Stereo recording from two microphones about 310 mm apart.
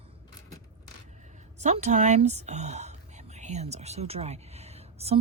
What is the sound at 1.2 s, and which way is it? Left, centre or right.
Speech, right.